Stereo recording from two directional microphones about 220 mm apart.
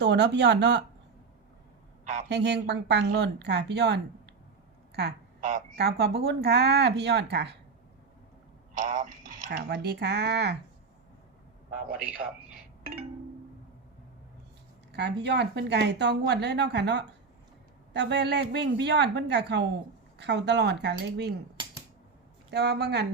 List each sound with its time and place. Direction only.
0.0 s speech: 50° right (ahead or behind)
2.3 s speech: 50° right (ahead or behind)
8.7 s speech: 35° right (ahead or behind)
11.9 s a man's voice: 5° right (ahead or behind)
14.9 s speech: 50° right (ahead or behind)
22.4 s speech: 50° right (ahead or behind)